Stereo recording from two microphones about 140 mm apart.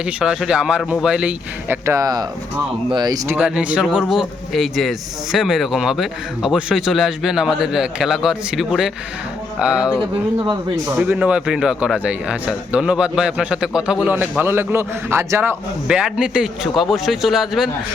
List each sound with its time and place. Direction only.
0.0 s a man's voice: 5° right (ahead or behind); by 3.2 s 30° right (ahead or behind)
3.2 s a man's voice: 10° right (ahead or behind)
10.9 s a man's voice: 10° right (ahead or behind)